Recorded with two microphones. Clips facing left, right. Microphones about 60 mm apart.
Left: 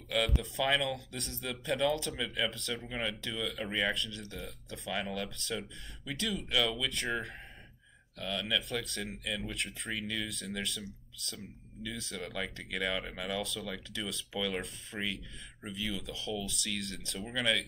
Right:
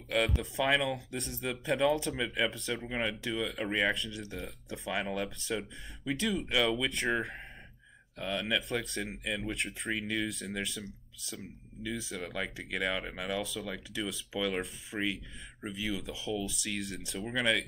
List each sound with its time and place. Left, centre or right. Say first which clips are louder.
0.6 s speech: right 2 dB; centre
7.1 s speech: right 5 dB; centre
8.2 s speech: right 2 dB; right